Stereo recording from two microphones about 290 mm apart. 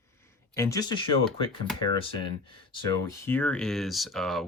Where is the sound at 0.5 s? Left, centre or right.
Centre.